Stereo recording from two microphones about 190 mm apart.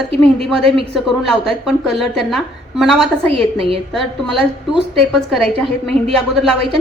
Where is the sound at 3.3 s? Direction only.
30° right (ahead or behind).